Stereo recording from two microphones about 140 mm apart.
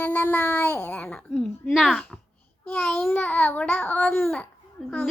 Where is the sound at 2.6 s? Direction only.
15° left (ahead or behind).